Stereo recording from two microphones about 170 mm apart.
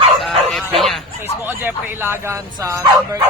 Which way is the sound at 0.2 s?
Centre (ahead or behind).